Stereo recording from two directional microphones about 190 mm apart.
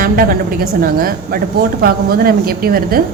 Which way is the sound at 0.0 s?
50° right (ahead or behind).